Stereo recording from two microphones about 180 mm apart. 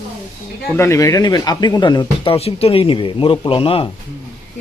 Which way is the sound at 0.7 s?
15° left (ahead or behind).